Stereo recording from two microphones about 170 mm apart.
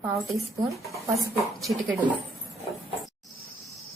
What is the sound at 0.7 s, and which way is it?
Speech, centre (ahead or behind).